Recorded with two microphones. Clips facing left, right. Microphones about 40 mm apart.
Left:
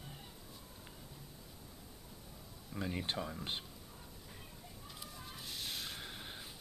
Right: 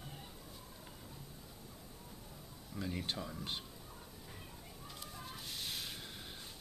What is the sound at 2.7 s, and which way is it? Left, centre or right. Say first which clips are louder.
Speech: left 2 dB; centre.